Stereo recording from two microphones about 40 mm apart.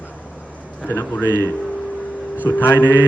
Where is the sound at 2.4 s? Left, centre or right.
Left.